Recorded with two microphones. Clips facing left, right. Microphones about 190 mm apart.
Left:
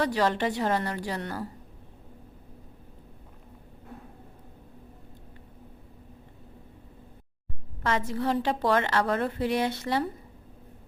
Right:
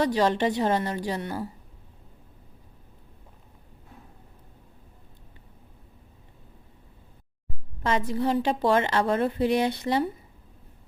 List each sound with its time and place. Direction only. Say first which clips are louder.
0.0 s a woman's voice: right 3 dB; 20° right (ahead or behind)
7.9 s a woman's voice: right 2 dB; 15° right (ahead or behind)